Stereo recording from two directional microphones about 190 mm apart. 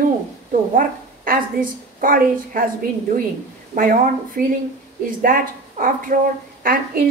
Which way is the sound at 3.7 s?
50° right (ahead or behind).